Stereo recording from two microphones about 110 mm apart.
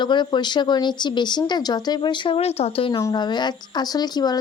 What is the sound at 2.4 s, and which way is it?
Speech, 70° left (ahead or behind).